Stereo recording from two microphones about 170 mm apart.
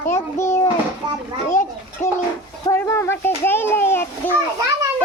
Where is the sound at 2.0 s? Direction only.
45° left (ahead or behind).